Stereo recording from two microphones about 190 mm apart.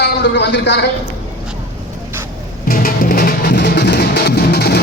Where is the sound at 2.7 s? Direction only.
50° left (ahead or behind).